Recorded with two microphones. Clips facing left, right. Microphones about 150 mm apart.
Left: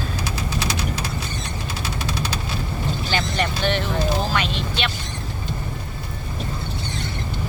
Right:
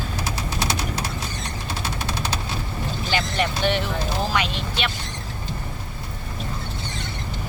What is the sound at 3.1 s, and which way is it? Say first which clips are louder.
Vehicle: right 1 dB; 10° right (ahead or behind).